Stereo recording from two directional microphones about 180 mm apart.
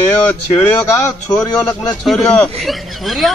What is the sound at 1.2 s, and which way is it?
A man's voice, 10° left (ahead or behind).